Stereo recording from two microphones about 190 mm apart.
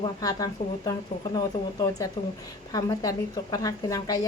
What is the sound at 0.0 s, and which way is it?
A woman's voice, 20° left (ahead or behind).